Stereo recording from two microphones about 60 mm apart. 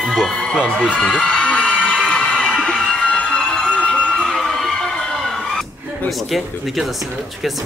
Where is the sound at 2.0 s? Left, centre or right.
Centre.